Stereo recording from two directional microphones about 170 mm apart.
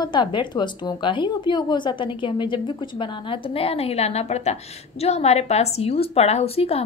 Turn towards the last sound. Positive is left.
turn(degrees=35)  # may be behind; listen again after turning